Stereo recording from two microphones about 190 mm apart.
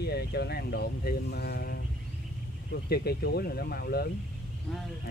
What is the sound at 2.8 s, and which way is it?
Speech, 55° left (ahead or behind).